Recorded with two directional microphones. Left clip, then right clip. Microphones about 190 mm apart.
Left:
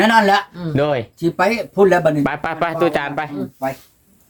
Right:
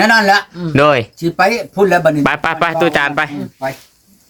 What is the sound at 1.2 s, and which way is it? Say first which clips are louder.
Speech: right 4 dB; 45° right (ahead or behind).